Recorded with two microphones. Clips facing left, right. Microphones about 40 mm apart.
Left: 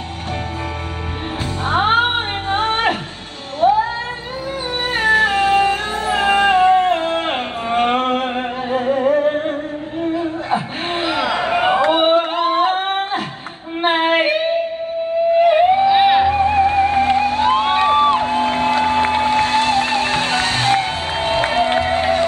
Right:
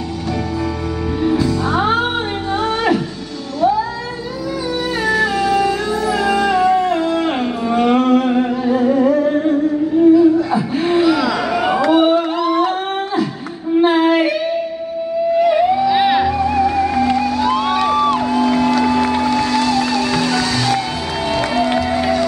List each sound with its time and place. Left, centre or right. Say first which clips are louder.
1.2 s music: right 7 dB; left
3.6 s cat: left 1 dB; left
5.0 s music: left 3 dB; left
13.7 s female singing: right 3 dB; left
15.3 s theremin: left 1 dB; left
15.9 s music: left 1 dB; left
16.3 s music: left 1 dB; left